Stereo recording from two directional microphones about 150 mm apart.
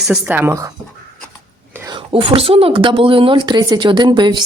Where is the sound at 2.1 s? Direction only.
40° right (ahead or behind).